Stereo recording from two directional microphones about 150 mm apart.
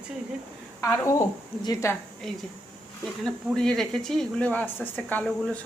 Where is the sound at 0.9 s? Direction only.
20° left (ahead or behind).